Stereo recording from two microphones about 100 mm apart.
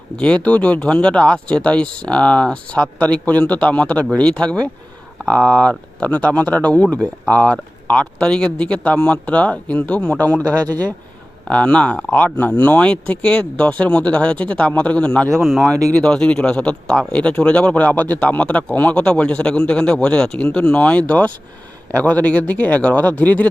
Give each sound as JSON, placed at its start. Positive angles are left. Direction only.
{"t": 0.2, "sound": "speech", "side_deg": 10}
{"t": 11.4, "sound": "speech", "side_deg": 10}
{"t": 15.3, "sound": "speech", "side_deg": 0}